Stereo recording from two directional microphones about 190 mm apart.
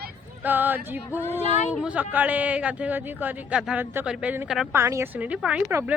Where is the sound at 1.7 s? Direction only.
5° right (ahead or behind).